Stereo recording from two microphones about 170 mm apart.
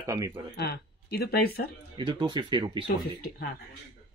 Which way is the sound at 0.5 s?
70° left (ahead or behind).